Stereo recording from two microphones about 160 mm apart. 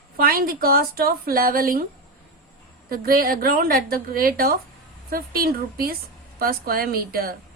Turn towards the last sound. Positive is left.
turn(degrees=-65)  # may be behind; listen again after turning